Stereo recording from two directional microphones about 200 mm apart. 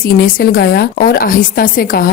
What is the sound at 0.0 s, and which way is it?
A woman's voice, 45° left (ahead or behind).